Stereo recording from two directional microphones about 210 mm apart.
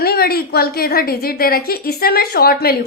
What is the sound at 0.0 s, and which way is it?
A woman's voice, 45° left (ahead or behind).